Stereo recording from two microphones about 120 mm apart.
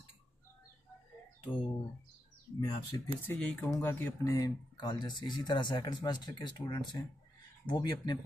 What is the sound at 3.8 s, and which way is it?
Speech, 25° left (ahead or behind).